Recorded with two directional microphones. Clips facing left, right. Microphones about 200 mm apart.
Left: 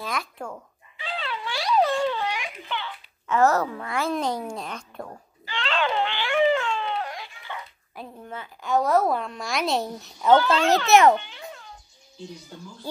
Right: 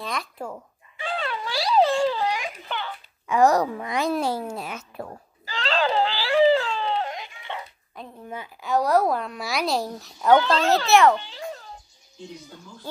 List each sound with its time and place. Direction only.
0.0 s speech: centre (ahead or behind)
0.9 s a sound: 50° right (ahead or behind)
3.3 s a woman's voice: 15° right (ahead or behind)
5.4 s a sound: 40° right (ahead or behind)
8.0 s a woman's voice: 5° left (ahead or behind)
8.3 s a woman's voice: 10° right (ahead or behind)
8.6 s a woman's voice: centre (ahead or behind)
10.9 s a child's voice: 20° left (ahead or behind)
11.1 s a sound: 35° right (ahead or behind)